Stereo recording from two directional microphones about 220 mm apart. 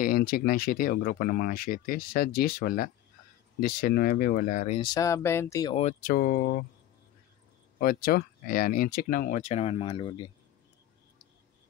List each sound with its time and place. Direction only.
0.0 s speech: 40° left (ahead or behind)
4.8 s speech: 15° left (ahead or behind)
5.8 s speech: 35° left (ahead or behind)
7.8 s speech: 40° left (ahead or behind); by 10.3 s 20° left (ahead or behind)